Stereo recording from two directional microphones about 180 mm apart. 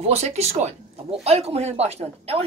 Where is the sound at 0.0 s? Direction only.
35° right (ahead or behind).